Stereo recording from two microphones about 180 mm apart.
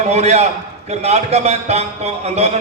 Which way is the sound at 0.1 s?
35° right (ahead or behind).